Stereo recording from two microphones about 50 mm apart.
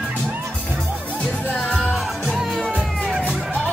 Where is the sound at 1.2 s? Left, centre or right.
Left.